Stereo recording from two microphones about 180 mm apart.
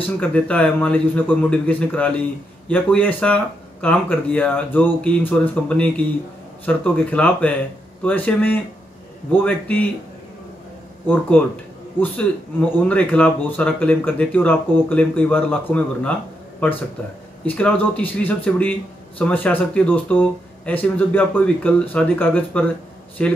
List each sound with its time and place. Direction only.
0.2 s speech: 5° left (ahead or behind)
11.1 s speech: 10° left (ahead or behind)
17.5 s speech: 10° left (ahead or behind)